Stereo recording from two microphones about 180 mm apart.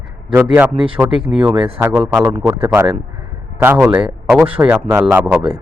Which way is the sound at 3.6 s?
10° right (ahead or behind).